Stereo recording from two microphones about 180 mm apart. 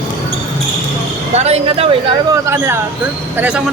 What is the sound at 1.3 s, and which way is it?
Speech, 35° right (ahead or behind).